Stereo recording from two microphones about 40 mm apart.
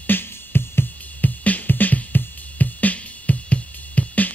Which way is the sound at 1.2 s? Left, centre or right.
Left.